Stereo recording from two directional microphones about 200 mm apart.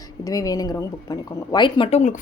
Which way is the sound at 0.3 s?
15° left (ahead or behind).